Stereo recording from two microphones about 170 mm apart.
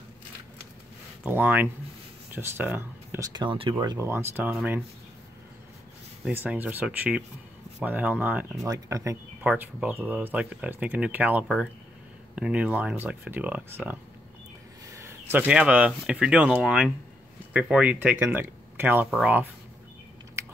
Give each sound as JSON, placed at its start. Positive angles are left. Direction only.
{"t": 1.2, "sound": "speech", "side_deg": -10}
{"t": 3.3, "sound": "speech", "side_deg": -30}
{"t": 6.2, "sound": "speech", "side_deg": -10}
{"t": 15.0, "sound": "speech", "side_deg": -10}
{"t": 20.4, "sound": "biting", "side_deg": -15}